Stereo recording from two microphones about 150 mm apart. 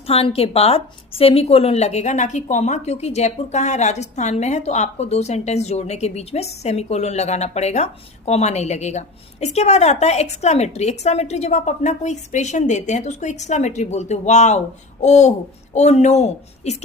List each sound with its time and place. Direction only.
0.1 s a woman's voice: 40° left (ahead or behind)